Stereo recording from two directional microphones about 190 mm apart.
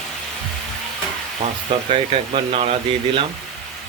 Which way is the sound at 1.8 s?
30° right (ahead or behind).